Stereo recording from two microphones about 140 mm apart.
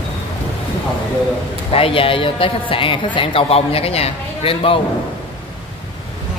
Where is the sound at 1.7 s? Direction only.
40° left (ahead or behind).